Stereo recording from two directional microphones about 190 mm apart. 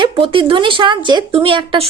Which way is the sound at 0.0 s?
25° right (ahead or behind).